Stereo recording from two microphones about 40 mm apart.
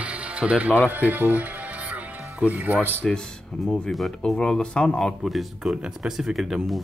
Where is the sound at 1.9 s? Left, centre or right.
Right.